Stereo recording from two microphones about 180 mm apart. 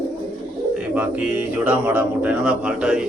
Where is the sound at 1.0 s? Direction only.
10° right (ahead or behind).